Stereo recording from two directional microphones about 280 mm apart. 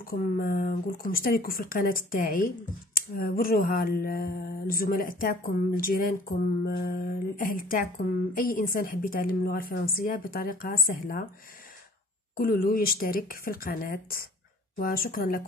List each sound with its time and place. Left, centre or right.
0.0 s speech: left
12.4 s speech: left